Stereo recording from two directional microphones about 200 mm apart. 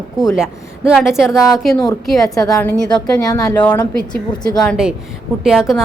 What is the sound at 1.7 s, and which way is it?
A woman's voice, 20° left (ahead or behind).